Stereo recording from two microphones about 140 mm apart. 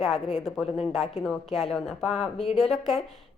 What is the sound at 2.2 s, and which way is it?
Speech, 45° left (ahead or behind).